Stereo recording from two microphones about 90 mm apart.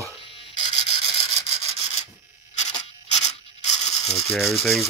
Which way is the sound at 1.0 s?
90° left.